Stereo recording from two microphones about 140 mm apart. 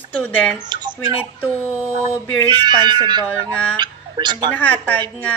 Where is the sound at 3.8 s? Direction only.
30° right (ahead or behind).